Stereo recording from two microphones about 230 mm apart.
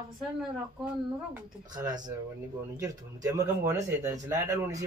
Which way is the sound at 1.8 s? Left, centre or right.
Centre.